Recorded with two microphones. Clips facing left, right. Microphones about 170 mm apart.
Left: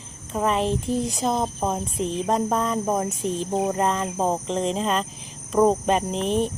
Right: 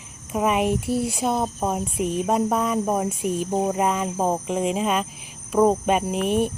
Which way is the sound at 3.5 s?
Centre (ahead or behind).